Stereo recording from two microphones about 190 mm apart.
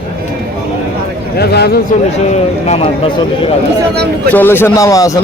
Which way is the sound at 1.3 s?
60° left (ahead or behind).